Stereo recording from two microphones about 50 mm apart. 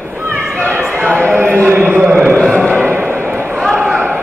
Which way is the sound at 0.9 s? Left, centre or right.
Right.